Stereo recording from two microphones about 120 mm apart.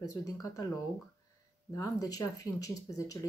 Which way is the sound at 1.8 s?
30° left (ahead or behind).